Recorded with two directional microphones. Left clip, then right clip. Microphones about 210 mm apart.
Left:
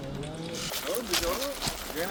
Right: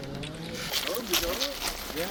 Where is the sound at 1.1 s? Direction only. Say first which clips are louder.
Right 1 dB; 20° right (ahead or behind).